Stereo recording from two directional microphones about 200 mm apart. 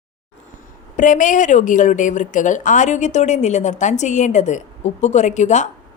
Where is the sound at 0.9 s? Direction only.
40° left (ahead or behind).